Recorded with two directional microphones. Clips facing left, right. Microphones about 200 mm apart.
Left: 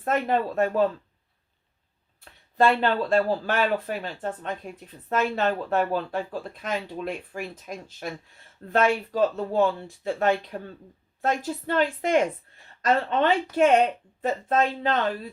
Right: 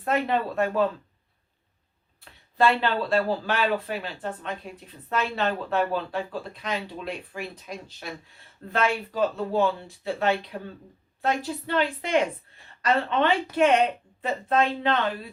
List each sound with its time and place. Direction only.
0.0 s speech: 45° left (ahead or behind)
2.6 s a woman's voice: 45° left (ahead or behind)